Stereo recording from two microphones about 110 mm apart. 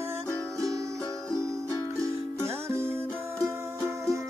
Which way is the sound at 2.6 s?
20° right (ahead or behind).